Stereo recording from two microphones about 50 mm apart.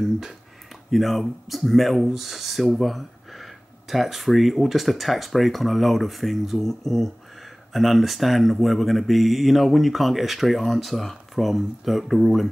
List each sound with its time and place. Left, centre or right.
0.9 s speech: centre